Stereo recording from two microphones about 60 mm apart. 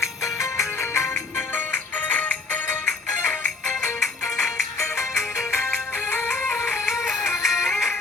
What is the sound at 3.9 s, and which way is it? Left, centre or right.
Music, left.